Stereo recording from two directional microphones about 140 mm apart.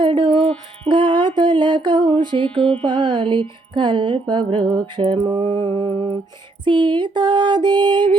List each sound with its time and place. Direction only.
0.0 s music: 35° right (ahead or behind)
0.9 s a sound: 35° right (ahead or behind)
2.8 s mantra: 35° right (ahead or behind)